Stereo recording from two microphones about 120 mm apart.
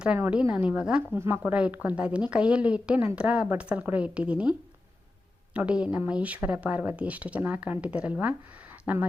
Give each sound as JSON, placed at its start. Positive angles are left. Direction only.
{"t": 0.2, "sound": "speech", "side_deg": -15}
{"t": 1.1, "sound": "speech", "side_deg": -20}
{"t": 5.5, "sound": "speech", "side_deg": -10}